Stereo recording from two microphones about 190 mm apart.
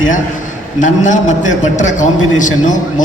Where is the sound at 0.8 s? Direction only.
40° left (ahead or behind).